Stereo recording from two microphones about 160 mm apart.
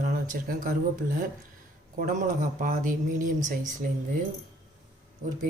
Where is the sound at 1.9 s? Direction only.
55° right (ahead or behind).